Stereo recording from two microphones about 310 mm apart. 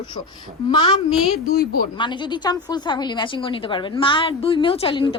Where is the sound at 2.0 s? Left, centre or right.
Centre.